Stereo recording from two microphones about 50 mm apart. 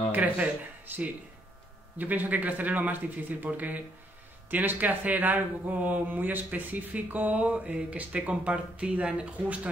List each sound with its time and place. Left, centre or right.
0.1 s speech: right